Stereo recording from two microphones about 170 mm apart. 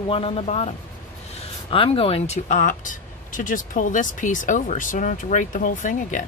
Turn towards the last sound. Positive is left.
turn(degrees=50)  # may be behind; listen again after turning